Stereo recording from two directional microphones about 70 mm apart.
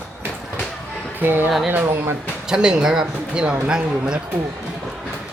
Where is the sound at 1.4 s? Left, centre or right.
Centre.